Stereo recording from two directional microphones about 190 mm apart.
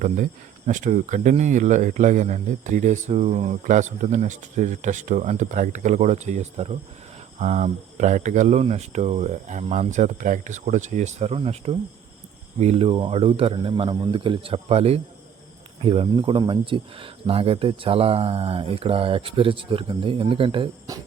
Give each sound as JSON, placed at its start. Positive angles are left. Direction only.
{"t": 0.7, "sound": "speech", "side_deg": -40}